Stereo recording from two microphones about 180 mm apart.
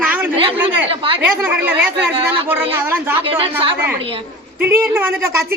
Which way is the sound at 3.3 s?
30° right (ahead or behind).